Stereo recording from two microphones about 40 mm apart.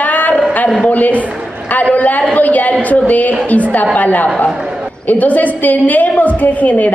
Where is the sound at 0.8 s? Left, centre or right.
Left.